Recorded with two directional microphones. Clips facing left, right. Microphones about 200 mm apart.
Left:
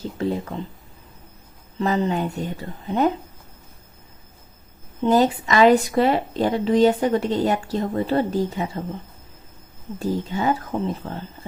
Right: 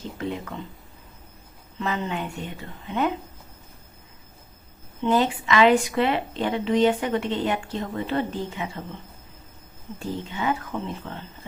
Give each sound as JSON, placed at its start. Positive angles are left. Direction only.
{"t": 0.0, "sound": "speech", "side_deg": 35}
{"t": 1.8, "sound": "a woman's voice", "side_deg": 35}
{"t": 4.9, "sound": "a woman's voice", "side_deg": 40}
{"t": 10.0, "sound": "a woman's voice", "side_deg": 40}